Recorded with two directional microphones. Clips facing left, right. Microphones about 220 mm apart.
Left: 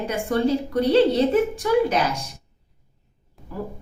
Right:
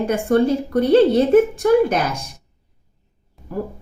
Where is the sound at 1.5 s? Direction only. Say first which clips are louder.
Right 5 dB; 50° right (ahead or behind).